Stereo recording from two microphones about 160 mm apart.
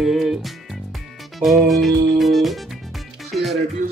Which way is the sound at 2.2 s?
Centre (ahead or behind).